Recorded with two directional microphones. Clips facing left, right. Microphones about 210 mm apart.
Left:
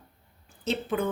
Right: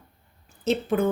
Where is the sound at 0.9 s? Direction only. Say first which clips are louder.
Right 5 dB; 50° right (ahead or behind).